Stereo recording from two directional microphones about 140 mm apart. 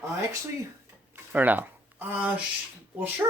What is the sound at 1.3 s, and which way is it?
Speech, 10° right (ahead or behind).